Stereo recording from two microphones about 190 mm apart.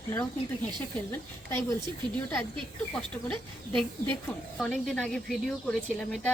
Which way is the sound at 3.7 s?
5° left (ahead or behind).